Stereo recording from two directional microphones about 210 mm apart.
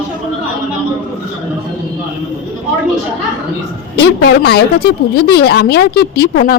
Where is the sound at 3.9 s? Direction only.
50° left (ahead or behind).